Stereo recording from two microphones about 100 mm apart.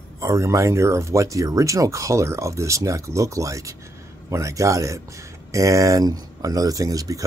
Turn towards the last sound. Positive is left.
turn(degrees=-35)  # may be behind; listen again after turning